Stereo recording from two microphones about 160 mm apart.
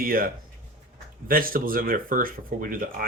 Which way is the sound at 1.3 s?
65° right (ahead or behind).